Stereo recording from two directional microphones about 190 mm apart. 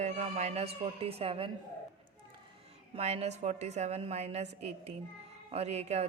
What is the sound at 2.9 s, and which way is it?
A woman's voice, 35° right (ahead or behind).